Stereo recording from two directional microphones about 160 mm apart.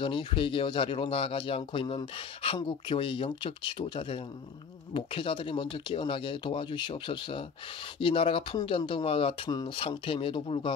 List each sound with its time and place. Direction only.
0.0 s speech: 30° left (ahead or behind)